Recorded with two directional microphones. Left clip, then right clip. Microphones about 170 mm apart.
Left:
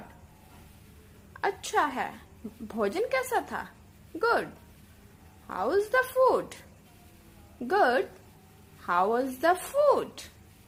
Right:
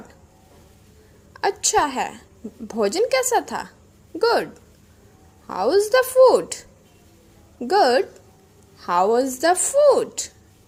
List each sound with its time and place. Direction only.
1.3 s a woman's voice: 25° right (ahead or behind)
5.5 s a woman's voice: 25° right (ahead or behind)
7.7 s a woman's voice: 25° right (ahead or behind)